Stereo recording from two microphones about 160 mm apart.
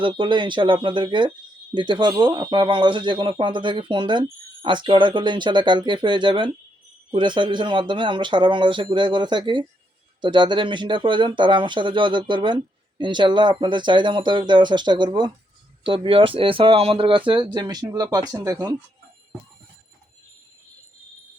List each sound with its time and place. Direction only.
0.0 s speech: 30° right (ahead or behind)